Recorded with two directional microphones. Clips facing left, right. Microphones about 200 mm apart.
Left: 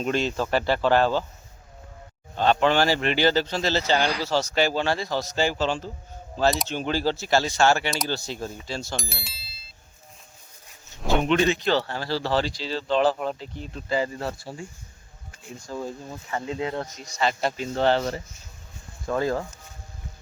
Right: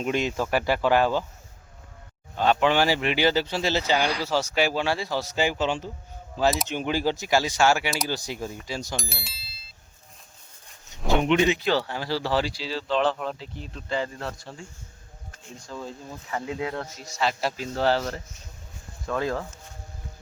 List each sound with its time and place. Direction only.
0.0 s speech: 10° right (ahead or behind)
2.3 s speech: 5° right (ahead or behind)
9.0 s bicycle bell: centre (ahead or behind)
11.2 s speech: 15° right (ahead or behind); by 15.9 s 10° left (ahead or behind)
16.3 s speech: 5° right (ahead or behind)
19.0 s speech: 25° left (ahead or behind)